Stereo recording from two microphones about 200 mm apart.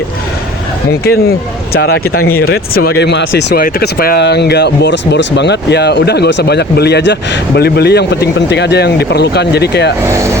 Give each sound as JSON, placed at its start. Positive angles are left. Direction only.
{"t": 0.9, "sound": "speech", "side_deg": 50}